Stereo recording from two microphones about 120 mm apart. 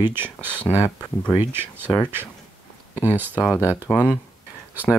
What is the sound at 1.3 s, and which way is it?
Speech, 20° right (ahead or behind).